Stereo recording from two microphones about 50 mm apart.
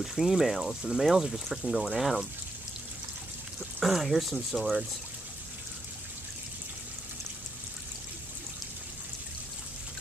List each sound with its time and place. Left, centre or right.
0.0 s speech: centre
3.8 s speech: centre